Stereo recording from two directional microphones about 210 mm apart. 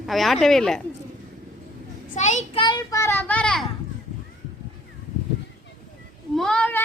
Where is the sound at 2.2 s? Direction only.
35° left (ahead or behind).